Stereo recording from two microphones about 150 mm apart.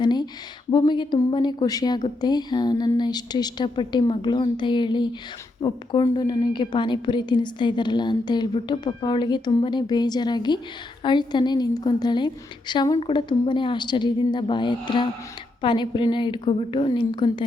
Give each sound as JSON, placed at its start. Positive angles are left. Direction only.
{"t": 0.0, "sound": "a woman's voice", "side_deg": 30}